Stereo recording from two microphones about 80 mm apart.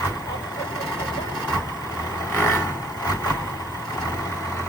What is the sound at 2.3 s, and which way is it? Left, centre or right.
Vehicle, left.